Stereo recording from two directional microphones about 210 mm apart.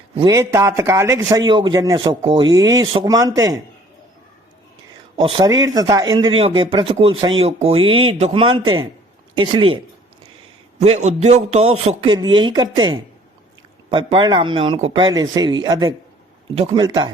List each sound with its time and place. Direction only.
0.3 s a man's voice: 15° right (ahead or behind)
5.1 s speech: 25° right (ahead or behind)
10.8 s a man's voice: 30° right (ahead or behind)
13.9 s speech: 20° right (ahead or behind)